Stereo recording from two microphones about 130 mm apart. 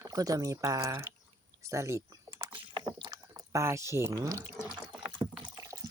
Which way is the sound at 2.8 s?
35° right (ahead or behind).